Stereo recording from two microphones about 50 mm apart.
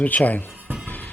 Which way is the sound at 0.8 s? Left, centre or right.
Left.